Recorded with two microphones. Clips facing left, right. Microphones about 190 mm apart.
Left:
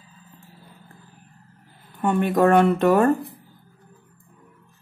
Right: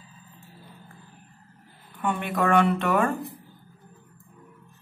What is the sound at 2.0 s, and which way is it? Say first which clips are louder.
Speech: left 7 dB; 40° left (ahead or behind).